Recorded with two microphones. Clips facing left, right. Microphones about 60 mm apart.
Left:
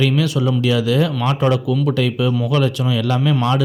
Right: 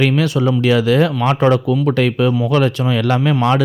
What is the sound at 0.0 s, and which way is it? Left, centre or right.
Speech, right.